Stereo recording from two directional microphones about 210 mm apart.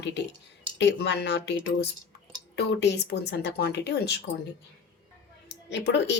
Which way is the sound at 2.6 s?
55° left (ahead or behind).